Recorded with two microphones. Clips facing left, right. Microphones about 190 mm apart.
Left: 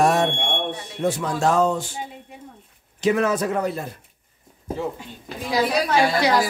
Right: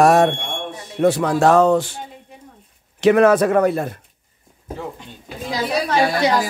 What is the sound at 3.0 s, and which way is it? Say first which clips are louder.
Speech: right 7 dB; 65° right (ahead or behind).